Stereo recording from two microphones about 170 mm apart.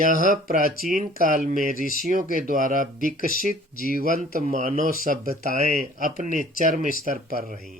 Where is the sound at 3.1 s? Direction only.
55° left (ahead or behind).